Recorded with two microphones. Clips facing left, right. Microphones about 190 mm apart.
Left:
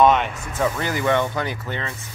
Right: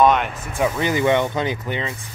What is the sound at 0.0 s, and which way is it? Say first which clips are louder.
Speech: even; centre (ahead or behind).